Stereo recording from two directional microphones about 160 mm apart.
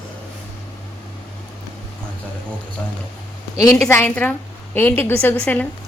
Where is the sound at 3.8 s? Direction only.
15° left (ahead or behind).